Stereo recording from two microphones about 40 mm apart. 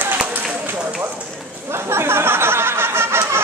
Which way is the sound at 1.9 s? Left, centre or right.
Right.